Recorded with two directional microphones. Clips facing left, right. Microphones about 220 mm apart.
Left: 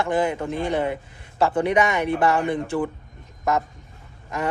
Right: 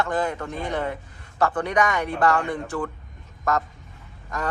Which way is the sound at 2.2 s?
10° left (ahead or behind).